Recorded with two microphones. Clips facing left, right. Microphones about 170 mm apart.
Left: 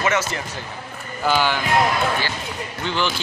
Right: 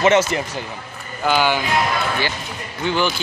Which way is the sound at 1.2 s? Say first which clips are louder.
Right 2 dB; centre (ahead or behind).